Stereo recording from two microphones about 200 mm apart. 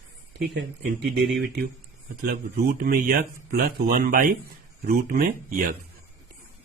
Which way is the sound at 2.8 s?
45° right (ahead or behind).